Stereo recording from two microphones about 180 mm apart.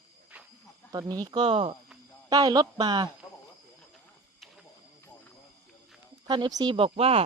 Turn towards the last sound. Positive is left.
turn(degrees=-35)  # may be behind; listen again after turning